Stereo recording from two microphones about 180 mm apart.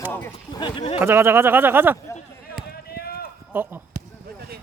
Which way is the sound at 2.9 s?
60° left (ahead or behind).